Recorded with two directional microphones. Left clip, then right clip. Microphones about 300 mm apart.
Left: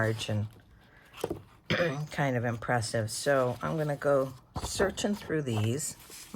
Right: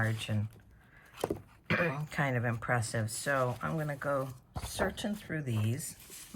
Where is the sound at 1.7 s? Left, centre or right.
Centre.